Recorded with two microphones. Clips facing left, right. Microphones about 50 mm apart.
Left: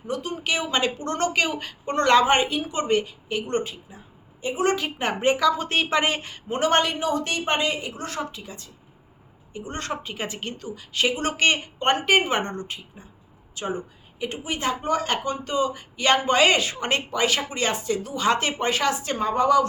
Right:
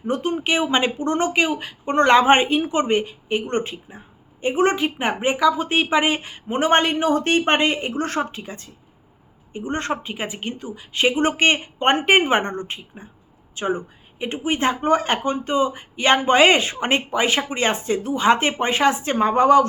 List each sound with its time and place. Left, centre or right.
0.1 s a woman's voice: right